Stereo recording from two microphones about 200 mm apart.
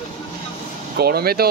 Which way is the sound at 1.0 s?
50° right (ahead or behind).